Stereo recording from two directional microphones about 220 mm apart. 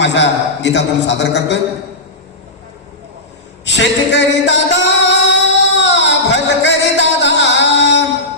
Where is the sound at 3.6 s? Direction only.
50° left (ahead or behind).